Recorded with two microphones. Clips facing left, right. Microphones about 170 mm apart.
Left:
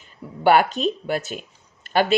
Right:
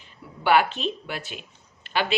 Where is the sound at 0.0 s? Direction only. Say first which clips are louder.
Left 8 dB; 45° left (ahead or behind).